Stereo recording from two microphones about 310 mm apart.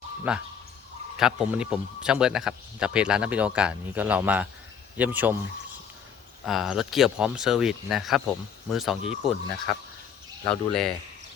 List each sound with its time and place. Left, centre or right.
0.3 s speech: centre
6.4 s speech: centre
10.4 s speech: centre